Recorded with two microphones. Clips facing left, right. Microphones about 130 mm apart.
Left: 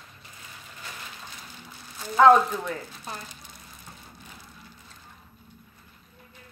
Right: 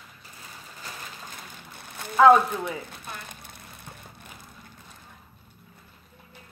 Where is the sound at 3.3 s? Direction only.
55° right (ahead or behind).